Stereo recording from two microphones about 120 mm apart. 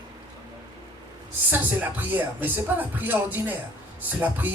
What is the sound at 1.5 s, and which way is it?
Music, 15° right (ahead or behind).